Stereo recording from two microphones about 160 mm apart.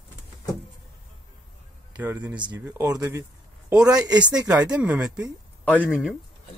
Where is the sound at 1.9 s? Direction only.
10° right (ahead or behind).